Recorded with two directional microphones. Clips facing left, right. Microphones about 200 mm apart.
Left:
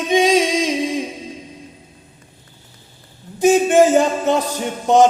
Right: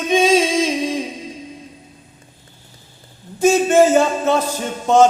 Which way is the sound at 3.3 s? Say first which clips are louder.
Left 1 dB; 15° left (ahead or behind).